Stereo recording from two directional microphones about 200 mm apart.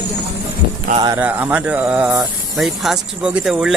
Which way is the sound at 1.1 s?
10° right (ahead or behind).